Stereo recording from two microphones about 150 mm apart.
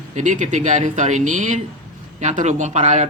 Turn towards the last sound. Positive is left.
turn(degrees=-50)  # may be behind; listen again after turning